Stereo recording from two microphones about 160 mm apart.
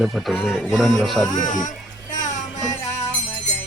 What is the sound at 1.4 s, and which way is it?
Speech, 55° left (ahead or behind).